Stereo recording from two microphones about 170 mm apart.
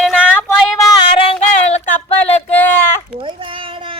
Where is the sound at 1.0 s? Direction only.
30° left (ahead or behind).